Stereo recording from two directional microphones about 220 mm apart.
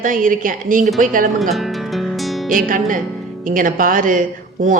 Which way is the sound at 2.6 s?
35° right (ahead or behind).